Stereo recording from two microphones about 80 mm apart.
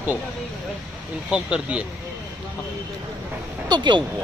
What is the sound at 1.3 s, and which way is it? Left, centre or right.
Speech, centre.